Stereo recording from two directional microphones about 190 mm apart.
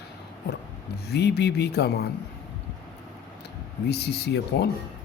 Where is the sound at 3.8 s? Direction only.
60° left (ahead or behind).